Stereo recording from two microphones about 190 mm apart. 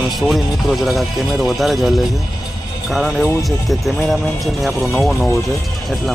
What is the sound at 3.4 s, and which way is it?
Speech, centre (ahead or behind).